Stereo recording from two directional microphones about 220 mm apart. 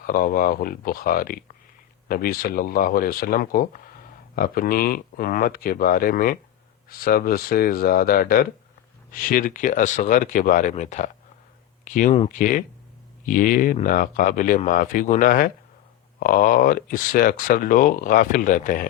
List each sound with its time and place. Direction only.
0.0 s speech: 40° left (ahead or behind)